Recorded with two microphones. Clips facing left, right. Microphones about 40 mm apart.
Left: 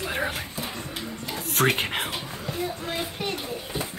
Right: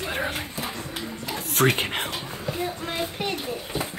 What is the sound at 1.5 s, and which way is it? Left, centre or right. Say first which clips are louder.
Speech: right 1 dB; centre.